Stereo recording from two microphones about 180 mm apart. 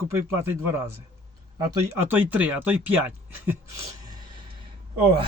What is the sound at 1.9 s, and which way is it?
Speech, 10° right (ahead or behind).